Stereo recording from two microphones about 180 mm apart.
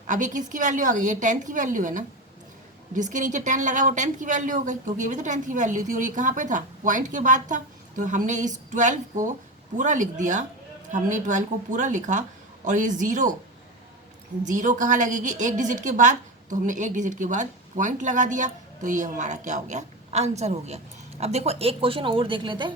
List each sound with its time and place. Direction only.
0.1 s a woman's voice: 45° right (ahead or behind)
14.4 s a woman's voice: 45° right (ahead or behind); by 22.7 s 25° right (ahead or behind)